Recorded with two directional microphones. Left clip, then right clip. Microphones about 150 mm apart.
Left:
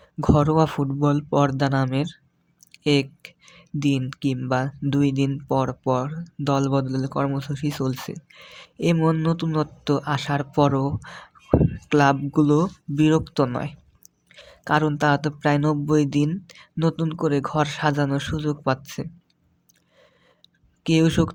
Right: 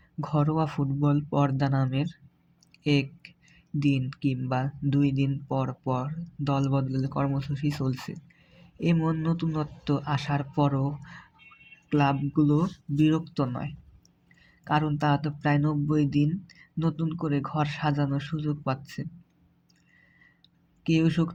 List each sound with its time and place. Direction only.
0.0 s speech: 30° left (ahead or behind)
20.8 s speech: 30° left (ahead or behind)